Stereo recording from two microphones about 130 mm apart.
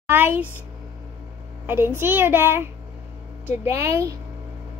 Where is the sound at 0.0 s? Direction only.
15° right (ahead or behind).